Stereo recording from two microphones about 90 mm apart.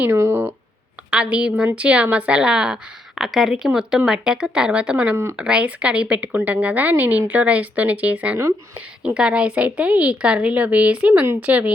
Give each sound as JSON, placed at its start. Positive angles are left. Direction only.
{"t": 0.0, "sound": "speech", "side_deg": -30}
{"t": 1.1, "sound": "a woman's voice", "side_deg": -10}